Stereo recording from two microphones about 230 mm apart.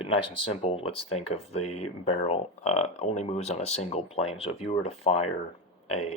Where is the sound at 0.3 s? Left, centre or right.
Left.